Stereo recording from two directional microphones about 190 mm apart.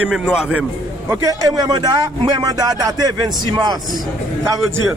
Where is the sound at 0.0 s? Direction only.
5° right (ahead or behind).